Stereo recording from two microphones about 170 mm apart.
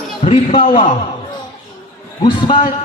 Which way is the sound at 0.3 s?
30° left (ahead or behind).